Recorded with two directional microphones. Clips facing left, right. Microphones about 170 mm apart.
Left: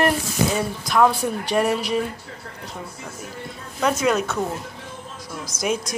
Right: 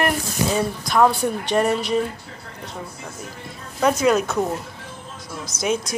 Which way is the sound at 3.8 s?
Centre (ahead or behind).